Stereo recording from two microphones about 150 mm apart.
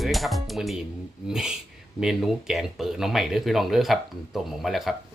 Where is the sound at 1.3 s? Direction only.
5° right (ahead or behind).